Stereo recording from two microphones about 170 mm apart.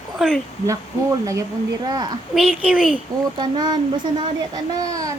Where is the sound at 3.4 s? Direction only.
25° right (ahead or behind).